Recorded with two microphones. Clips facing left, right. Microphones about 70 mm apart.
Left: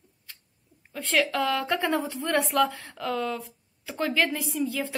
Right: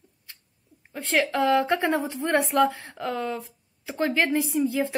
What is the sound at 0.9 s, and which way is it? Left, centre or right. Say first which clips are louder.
Speech: right 1 dB; right.